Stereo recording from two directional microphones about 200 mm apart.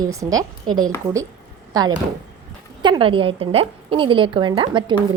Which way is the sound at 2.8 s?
25° right (ahead or behind).